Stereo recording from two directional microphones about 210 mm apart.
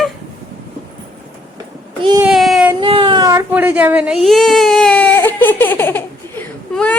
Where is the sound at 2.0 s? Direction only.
20° right (ahead or behind).